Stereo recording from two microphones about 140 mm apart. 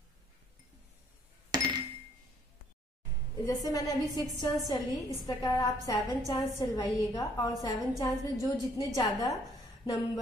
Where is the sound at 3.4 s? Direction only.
25° left (ahead or behind).